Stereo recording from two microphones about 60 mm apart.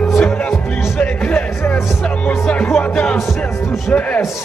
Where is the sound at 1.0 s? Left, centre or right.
Left.